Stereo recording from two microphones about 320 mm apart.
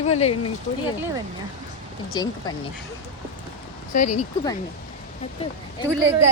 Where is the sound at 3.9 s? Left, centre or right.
Left.